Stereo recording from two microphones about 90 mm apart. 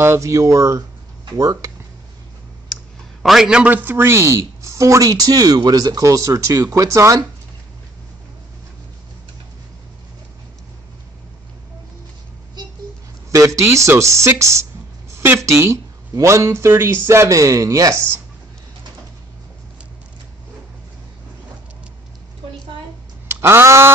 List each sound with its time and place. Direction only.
0.0 s speech: 30° right (ahead or behind)
3.2 s a man's voice: centre (ahead or behind)
3.7 s speech: 25° right (ahead or behind)
13.3 s speech: 35° right (ahead or behind)
23.2 s a sound: 25° right (ahead or behind)